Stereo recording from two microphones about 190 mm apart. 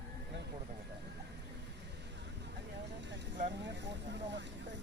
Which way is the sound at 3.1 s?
65° right (ahead or behind).